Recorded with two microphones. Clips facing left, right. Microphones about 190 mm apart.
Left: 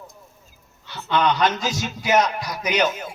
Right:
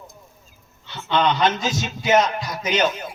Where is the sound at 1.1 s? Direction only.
25° right (ahead or behind).